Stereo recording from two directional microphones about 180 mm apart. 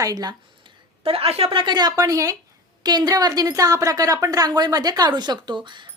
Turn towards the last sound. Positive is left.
turn(degrees=-25)  # may be behind; listen again after turning